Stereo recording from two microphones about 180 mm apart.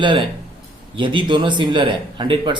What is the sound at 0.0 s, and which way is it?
Speech, 25° right (ahead or behind).